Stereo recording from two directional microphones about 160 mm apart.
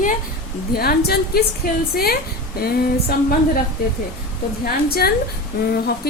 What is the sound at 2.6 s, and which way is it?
Speech, 75° left (ahead or behind).